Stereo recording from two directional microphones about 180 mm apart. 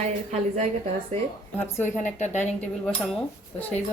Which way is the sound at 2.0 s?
40° left (ahead or behind).